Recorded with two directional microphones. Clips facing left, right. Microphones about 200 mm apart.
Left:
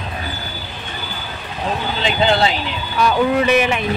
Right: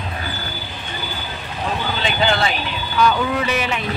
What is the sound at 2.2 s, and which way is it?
Speech, 25° left (ahead or behind).